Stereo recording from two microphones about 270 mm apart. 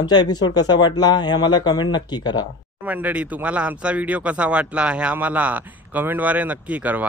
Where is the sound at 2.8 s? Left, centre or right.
Centre.